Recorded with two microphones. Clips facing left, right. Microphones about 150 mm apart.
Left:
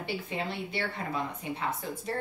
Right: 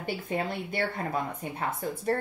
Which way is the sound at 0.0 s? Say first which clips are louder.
Right 3 dB; 50° right (ahead or behind).